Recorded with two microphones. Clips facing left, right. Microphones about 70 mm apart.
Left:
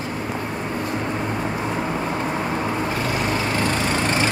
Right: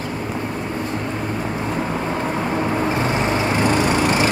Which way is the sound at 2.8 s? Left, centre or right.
Right.